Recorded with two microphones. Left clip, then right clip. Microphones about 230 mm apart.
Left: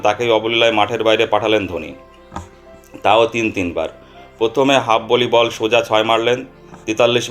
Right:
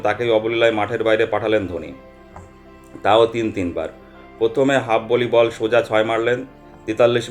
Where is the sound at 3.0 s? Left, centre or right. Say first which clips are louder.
Left 2 dB; left.